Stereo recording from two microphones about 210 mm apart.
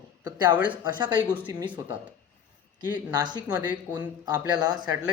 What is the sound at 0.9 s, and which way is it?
Speech, 20° right (ahead or behind).